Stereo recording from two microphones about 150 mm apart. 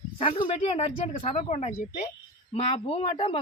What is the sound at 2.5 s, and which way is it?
Speech, 40° left (ahead or behind).